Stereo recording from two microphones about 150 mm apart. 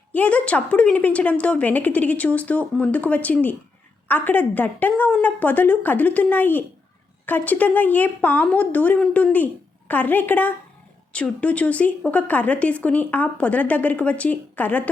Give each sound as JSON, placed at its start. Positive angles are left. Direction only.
{"t": 0.1, "sound": "speech", "side_deg": 10}